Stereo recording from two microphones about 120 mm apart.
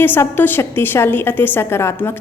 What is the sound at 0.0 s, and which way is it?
A woman's voice, 15° left (ahead or behind).